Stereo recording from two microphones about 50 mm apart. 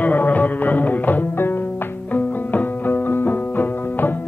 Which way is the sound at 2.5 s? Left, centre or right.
Left.